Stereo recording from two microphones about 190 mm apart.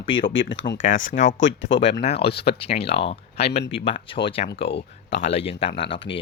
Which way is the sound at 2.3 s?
55° left (ahead or behind).